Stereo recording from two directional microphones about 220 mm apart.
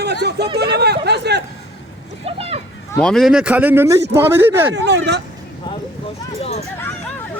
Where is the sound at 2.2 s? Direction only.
25° right (ahead or behind).